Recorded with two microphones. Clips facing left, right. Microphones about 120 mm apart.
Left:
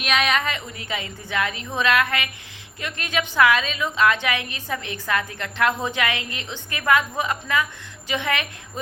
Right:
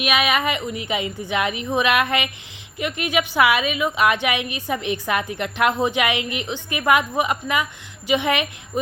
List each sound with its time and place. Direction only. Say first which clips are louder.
0.0 s a woman's voice: right 2 dB; 5° right (ahead or behind)